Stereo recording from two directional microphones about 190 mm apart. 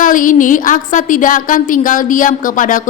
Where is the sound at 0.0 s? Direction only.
45° left (ahead or behind).